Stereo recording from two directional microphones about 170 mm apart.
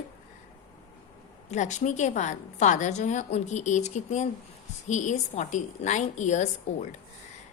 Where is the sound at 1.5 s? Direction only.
45° left (ahead or behind).